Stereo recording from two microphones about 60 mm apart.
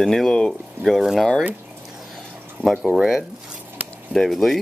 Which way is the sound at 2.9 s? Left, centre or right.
Centre.